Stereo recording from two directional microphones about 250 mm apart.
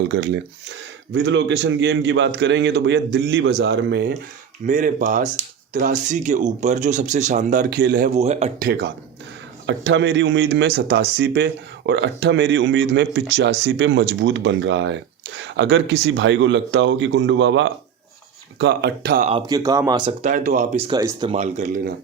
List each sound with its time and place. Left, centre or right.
0.1 s speech: right
4.6 s speech: right
19.3 s speech: centre